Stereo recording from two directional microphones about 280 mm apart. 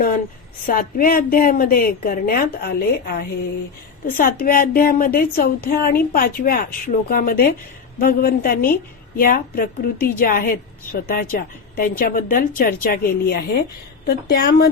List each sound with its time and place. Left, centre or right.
0.7 s a woman's voice: left